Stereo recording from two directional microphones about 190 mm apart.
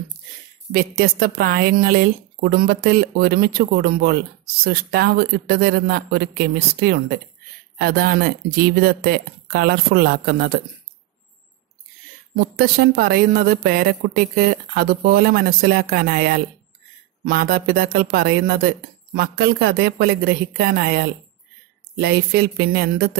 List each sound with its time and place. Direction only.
0.7 s speech: 50° right (ahead or behind)
12.5 s speech: 50° right (ahead or behind)